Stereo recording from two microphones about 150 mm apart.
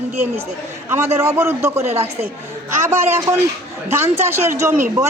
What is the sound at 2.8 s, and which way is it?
A man's voice, 20° right (ahead or behind).